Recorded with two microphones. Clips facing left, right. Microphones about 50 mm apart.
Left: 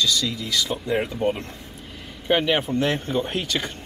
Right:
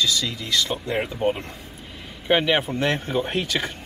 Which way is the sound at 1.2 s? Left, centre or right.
Centre.